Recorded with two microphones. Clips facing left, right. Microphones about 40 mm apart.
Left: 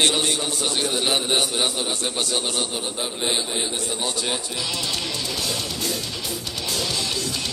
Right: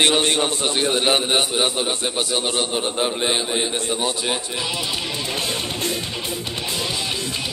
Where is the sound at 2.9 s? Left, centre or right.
Right.